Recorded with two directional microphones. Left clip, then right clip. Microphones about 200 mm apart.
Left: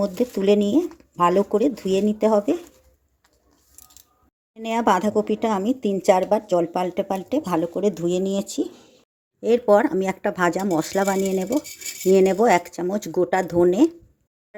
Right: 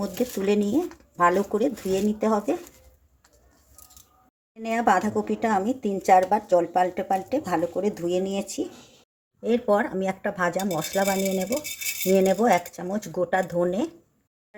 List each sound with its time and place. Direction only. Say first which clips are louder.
0.3 s speech: left 5 dB; 35° left (ahead or behind)
4.5 s speech: left 2 dB; 35° left (ahead or behind)
9.4 s speech: left 6 dB; 45° left (ahead or behind)